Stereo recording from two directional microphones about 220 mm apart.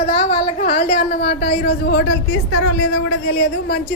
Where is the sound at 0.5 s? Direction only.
40° left (ahead or behind).